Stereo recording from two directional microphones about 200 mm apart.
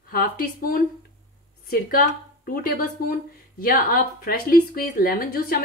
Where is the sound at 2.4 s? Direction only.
45° left (ahead or behind).